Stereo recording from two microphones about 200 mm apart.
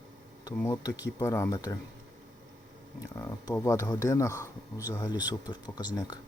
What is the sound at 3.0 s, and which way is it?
Speech, 15° left (ahead or behind).